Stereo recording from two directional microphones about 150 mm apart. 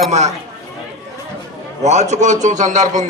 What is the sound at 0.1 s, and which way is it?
Speech, 50° right (ahead or behind).